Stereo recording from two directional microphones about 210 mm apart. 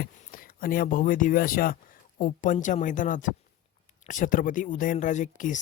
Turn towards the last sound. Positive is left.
turn(degrees=35)  # may be behind; listen again after turning